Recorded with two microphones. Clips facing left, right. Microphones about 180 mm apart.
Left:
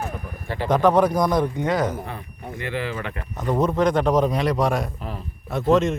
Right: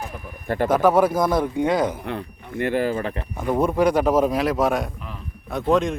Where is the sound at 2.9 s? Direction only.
30° right (ahead or behind).